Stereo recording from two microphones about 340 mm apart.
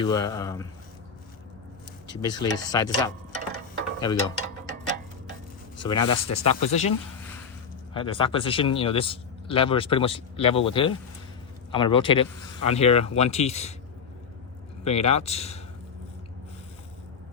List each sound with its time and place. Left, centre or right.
0.0 s speech: centre
2.2 s speech: centre
4.0 s speech: centre
5.8 s speech: centre
7.9 s speech: centre
14.8 s speech: centre